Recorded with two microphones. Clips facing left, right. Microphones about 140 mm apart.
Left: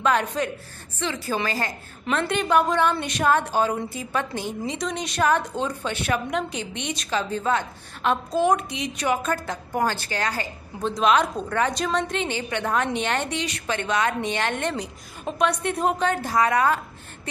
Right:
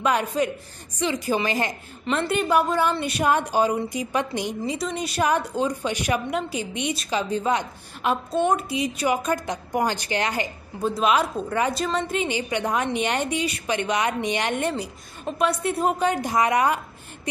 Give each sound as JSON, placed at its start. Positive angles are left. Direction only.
{"t": 0.0, "sound": "a woman's voice", "side_deg": -10}
{"t": 2.1, "sound": "a woman's voice", "side_deg": -5}
{"t": 4.7, "sound": "a woman's voice", "side_deg": -5}
{"t": 10.8, "sound": "a woman's voice", "side_deg": -5}